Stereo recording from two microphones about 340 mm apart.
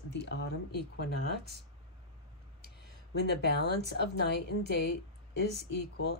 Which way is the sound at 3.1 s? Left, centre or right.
Left.